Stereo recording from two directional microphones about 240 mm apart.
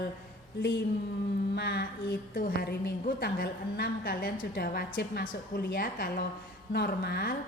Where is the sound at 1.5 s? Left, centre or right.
Left.